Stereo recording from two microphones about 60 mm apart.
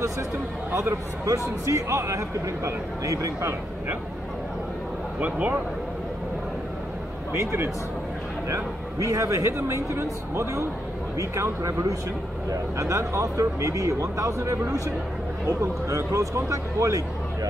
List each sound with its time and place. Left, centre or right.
0.7 s speech: right
1.7 s speech: right
5.2 s speech: right
8.5 s speech: right